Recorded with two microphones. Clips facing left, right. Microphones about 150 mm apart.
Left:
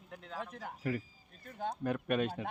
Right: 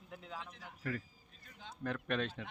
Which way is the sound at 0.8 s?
15° left (ahead or behind).